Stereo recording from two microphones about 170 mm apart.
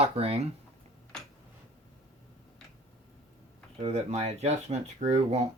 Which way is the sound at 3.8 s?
40° right (ahead or behind).